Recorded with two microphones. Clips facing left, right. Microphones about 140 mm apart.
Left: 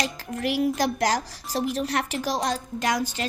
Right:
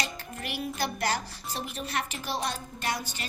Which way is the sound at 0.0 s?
90° left.